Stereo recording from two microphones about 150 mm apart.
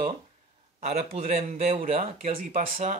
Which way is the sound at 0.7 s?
45° right (ahead or behind).